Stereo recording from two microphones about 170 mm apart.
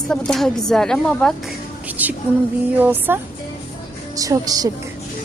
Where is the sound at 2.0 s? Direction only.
10° right (ahead or behind).